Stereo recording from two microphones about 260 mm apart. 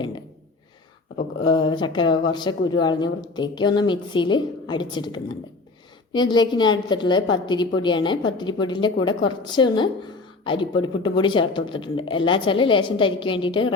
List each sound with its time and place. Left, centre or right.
1.5 s a woman's voice: centre